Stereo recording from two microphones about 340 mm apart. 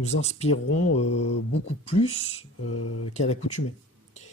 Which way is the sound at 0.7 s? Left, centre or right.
Left.